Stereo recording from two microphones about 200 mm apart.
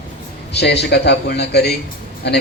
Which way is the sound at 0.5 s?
55° left (ahead or behind).